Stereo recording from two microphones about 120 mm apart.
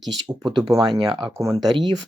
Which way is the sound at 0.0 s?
35° right (ahead or behind).